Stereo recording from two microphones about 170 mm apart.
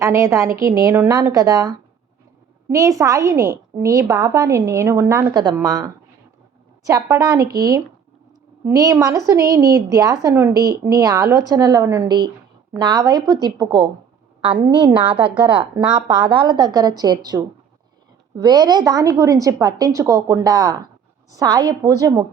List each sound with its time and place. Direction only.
0.0 s a woman's voice: 20° right (ahead or behind)